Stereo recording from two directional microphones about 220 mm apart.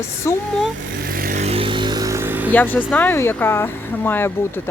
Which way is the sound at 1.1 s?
40° right (ahead or behind).